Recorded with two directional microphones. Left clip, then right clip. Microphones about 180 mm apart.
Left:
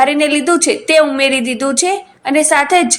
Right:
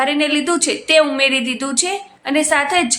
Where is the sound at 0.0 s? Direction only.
20° left (ahead or behind).